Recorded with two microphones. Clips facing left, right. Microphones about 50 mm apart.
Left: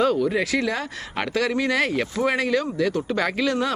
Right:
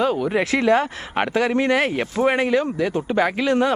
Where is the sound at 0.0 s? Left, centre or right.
Right.